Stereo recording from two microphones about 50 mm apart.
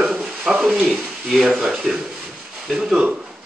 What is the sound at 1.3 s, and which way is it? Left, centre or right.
A man's voice, centre.